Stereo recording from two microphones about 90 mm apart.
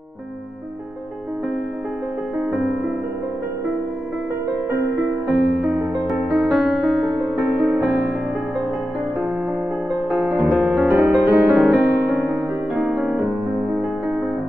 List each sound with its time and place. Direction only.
2.3 s music: 10° right (ahead or behind)
5.6 s music: 10° right (ahead or behind)
10.3 s music: 5° right (ahead or behind)
10.9 s music: 20° right (ahead or behind)
11.5 s music: 5° right (ahead or behind)